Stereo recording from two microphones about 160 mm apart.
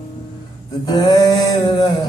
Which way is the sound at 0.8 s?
25° left (ahead or behind).